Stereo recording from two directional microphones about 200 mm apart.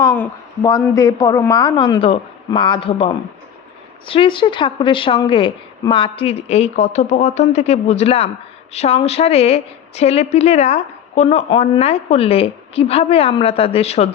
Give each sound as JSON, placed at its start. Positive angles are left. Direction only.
{"t": 0.0, "sound": "a woman's voice", "side_deg": 15}